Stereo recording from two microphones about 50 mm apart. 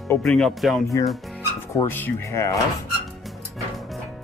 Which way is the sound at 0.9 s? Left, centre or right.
Left.